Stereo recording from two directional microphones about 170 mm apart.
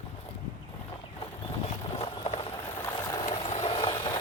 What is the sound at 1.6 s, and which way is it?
Vehicle, 35° left (ahead or behind).